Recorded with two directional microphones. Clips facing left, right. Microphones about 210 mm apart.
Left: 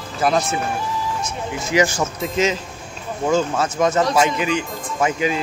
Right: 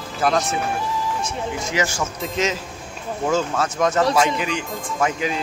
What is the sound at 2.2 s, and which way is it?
Speech, centre (ahead or behind).